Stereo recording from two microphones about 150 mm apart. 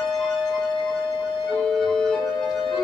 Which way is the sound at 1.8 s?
5° left (ahead or behind).